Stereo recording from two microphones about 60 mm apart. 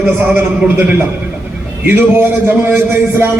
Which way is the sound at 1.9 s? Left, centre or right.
Right.